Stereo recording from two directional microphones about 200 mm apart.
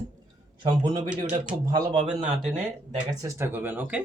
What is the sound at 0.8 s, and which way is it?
Speech, 20° right (ahead or behind).